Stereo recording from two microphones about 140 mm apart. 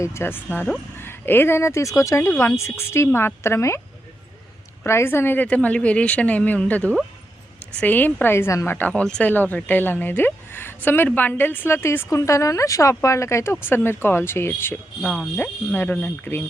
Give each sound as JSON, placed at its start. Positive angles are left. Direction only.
{"t": 0.0, "sound": "a woman's voice", "side_deg": 20}
{"t": 4.8, "sound": "speech", "side_deg": 15}
{"t": 15.0, "sound": "speech", "side_deg": 0}
{"t": 15.4, "sound": "speech", "side_deg": 15}